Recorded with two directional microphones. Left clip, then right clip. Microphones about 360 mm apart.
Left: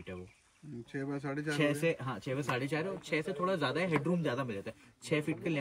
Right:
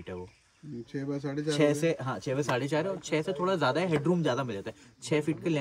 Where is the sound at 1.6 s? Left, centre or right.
Centre.